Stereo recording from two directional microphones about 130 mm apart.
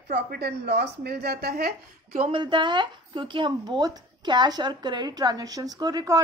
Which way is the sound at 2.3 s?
40° right (ahead or behind).